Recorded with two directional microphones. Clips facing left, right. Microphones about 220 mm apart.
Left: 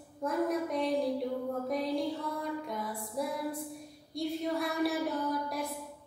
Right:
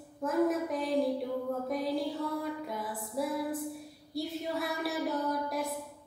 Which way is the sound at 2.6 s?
5° right (ahead or behind).